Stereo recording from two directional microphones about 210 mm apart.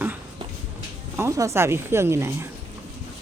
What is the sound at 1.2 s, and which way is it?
Speech, 15° right (ahead or behind).